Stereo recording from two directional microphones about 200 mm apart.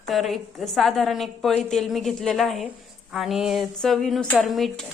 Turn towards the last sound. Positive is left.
turn(degrees=0)  # may be behind; listen again after turning